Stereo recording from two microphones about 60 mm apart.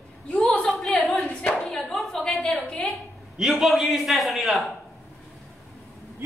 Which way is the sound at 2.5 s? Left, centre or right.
Centre.